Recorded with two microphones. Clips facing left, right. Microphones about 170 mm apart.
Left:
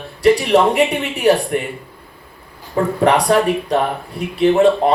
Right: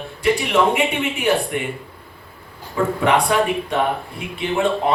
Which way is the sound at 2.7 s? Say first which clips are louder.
Left 3 dB; 40° left (ahead or behind).